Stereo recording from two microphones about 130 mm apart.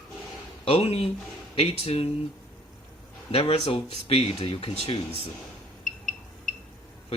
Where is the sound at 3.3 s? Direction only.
45° left (ahead or behind).